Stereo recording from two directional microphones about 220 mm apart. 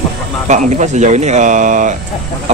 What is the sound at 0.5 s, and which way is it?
Speech, 30° right (ahead or behind).